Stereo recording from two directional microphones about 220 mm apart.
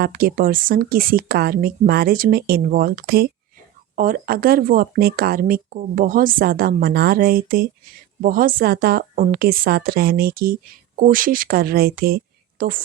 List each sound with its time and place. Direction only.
0.0 s speech: 40° right (ahead or behind)